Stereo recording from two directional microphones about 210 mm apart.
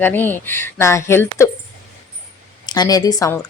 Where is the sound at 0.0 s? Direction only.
10° left (ahead or behind).